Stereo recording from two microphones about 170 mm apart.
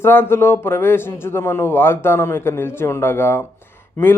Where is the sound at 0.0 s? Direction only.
15° left (ahead or behind).